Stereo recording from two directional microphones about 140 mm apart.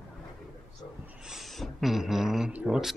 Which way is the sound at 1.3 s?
Centre (ahead or behind).